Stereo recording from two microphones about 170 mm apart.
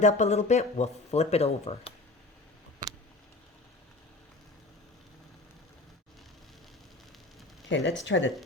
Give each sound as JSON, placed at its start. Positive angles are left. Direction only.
{"t": 0.0, "sound": "speech", "side_deg": 45}
{"t": 7.7, "sound": "speech", "side_deg": 90}